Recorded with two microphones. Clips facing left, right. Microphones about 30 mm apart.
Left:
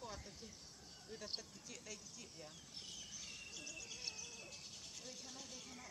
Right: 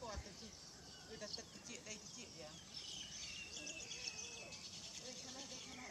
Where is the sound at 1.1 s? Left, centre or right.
Centre.